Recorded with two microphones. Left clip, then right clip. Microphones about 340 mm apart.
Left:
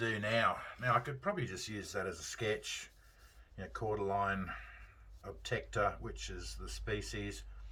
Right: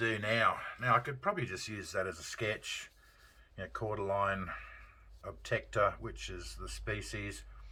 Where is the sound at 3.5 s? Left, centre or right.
Centre.